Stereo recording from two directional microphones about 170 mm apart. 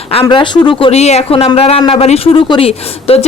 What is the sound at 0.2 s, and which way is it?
Speech, 30° left (ahead or behind).